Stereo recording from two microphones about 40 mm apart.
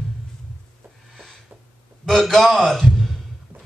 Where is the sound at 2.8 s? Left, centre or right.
Centre.